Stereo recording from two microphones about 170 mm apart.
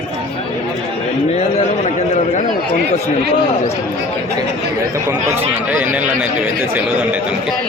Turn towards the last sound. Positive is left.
turn(degrees=-10)  # may be behind; listen again after turning